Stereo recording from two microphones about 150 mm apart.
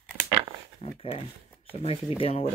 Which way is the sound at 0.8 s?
40° left (ahead or behind).